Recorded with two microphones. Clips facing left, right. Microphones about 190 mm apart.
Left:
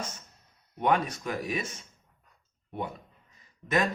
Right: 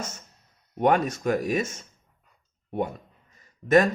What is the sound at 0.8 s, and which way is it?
Speech, 45° right (ahead or behind).